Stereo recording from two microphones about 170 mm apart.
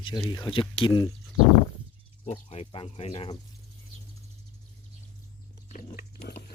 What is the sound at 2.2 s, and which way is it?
Speech, 35° left (ahead or behind).